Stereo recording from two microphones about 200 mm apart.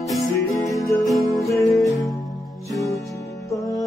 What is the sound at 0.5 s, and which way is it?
Music, 15° left (ahead or behind).